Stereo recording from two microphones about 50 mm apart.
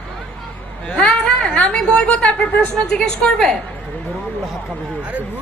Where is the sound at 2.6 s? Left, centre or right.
Centre.